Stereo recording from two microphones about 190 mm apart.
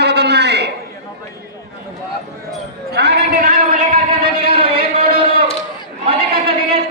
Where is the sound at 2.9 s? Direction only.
60° right (ahead or behind).